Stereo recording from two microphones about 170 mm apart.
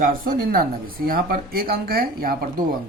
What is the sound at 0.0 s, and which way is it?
Speech, 55° right (ahead or behind).